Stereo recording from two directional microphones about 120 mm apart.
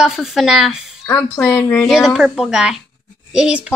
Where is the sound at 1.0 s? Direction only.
20° left (ahead or behind).